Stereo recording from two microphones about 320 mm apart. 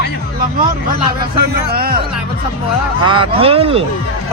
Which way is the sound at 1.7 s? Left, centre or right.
Right.